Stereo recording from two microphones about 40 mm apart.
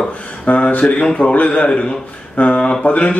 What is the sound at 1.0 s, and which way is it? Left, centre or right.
A man's voice, left.